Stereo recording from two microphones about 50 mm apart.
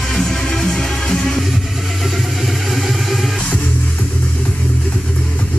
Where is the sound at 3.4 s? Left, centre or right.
Left.